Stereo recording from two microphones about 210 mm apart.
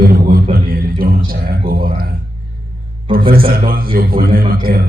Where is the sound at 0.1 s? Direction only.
45° right (ahead or behind).